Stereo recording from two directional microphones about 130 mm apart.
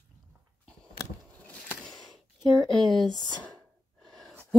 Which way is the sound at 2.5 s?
Centre (ahead or behind).